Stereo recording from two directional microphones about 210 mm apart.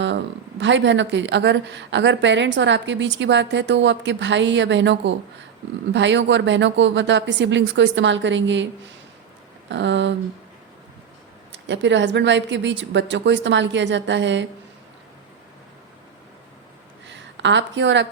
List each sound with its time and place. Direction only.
0.6 s a woman's voice: 60° right (ahead or behind)
9.6 s a woman's voice: 60° right (ahead or behind)
11.5 s a woman's voice: 60° right (ahead or behind)
17.1 s speech: 60° right (ahead or behind)